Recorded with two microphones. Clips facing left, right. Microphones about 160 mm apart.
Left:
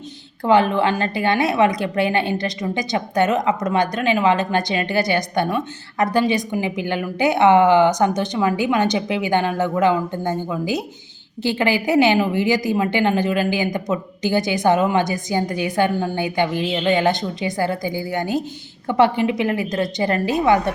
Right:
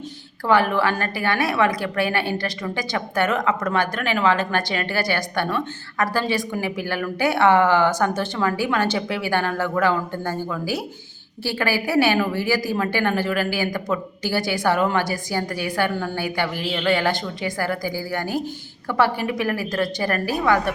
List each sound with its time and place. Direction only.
0.4 s a woman's voice: 20° left (ahead or behind)